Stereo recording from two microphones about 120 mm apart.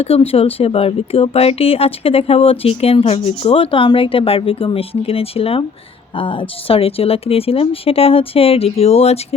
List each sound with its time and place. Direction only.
0.0 s speech: 55° left (ahead or behind)